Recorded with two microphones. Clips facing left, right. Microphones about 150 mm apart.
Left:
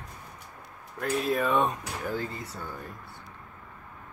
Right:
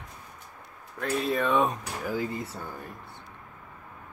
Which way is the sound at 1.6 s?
10° right (ahead or behind).